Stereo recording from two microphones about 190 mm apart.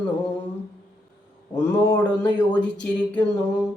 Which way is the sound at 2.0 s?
5° left (ahead or behind).